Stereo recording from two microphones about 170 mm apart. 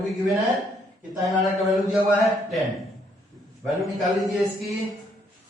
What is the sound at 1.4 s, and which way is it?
Speech, centre (ahead or behind).